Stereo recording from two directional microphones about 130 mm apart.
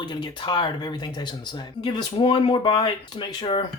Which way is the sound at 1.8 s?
40° left (ahead or behind).